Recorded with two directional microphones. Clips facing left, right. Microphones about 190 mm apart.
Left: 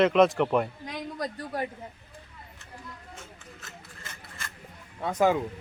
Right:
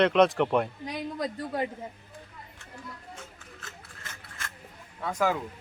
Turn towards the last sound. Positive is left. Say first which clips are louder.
# left 4 dB
turn(degrees=20)  # may be behind; listen again after turning